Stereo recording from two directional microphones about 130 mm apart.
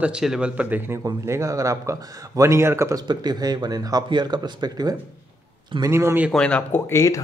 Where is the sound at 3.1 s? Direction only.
30° right (ahead or behind).